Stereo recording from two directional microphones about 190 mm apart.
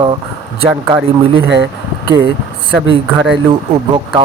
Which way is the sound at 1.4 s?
70° right (ahead or behind).